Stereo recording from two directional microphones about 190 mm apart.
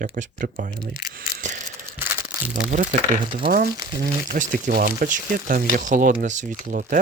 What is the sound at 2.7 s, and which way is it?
Speech, 40° right (ahead or behind).